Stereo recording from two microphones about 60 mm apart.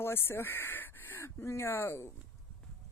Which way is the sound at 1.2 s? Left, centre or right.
Left.